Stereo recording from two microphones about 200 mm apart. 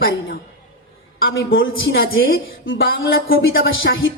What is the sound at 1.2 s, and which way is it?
Speech, 75° left (ahead or behind).